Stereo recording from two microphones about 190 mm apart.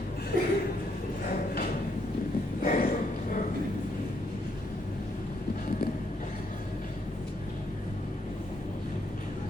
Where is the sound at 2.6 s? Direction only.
45° left (ahead or behind).